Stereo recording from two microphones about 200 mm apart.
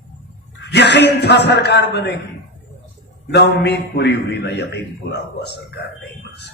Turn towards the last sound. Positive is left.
turn(degrees=55)  # may be behind; listen again after turning